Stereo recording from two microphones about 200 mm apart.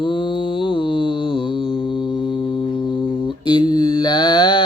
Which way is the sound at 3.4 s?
20° left (ahead or behind).